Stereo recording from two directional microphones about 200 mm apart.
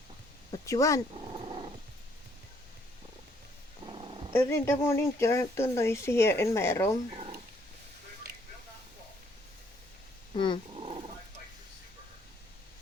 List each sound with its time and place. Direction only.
0.5 s speech: 15° left (ahead or behind)
1.1 s dog: 25° right (ahead or behind)
3.8 s purr: 25° right (ahead or behind)
4.3 s speech: 10° left (ahead or behind)
7.2 s a sound: 25° right (ahead or behind)
10.3 s speech: 25° left (ahead or behind)
10.8 s dog: 30° right (ahead or behind)